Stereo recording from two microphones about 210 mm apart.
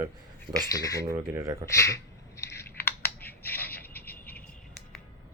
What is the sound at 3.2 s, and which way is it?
Finger snapping, 10° left (ahead or behind).